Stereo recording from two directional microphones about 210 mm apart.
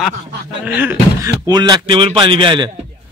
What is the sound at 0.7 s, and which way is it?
Speech, 10° right (ahead or behind).